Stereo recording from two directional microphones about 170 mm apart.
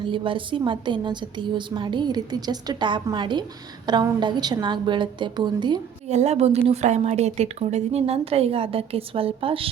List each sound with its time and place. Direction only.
0.0 s a woman's voice: 30° right (ahead or behind)
6.1 s a woman's voice: 40° right (ahead or behind)